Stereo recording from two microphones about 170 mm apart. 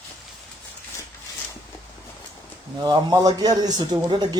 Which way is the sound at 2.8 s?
25° right (ahead or behind).